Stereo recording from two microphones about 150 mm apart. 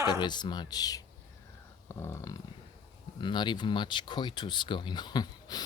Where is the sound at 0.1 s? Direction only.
30° left (ahead or behind).